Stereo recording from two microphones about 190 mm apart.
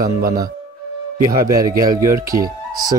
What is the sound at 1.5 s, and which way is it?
A man's voice, 20° right (ahead or behind).